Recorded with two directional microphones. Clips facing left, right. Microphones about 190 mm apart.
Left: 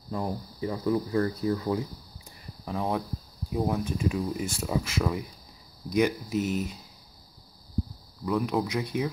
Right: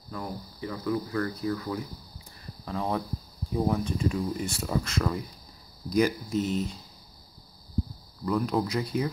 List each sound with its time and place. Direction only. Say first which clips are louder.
0.1 s speech: left 5 dB; 30° left (ahead or behind)
2.6 s speech: left 1 dB; 10° left (ahead or behind)
8.3 s speech: even; centre (ahead or behind)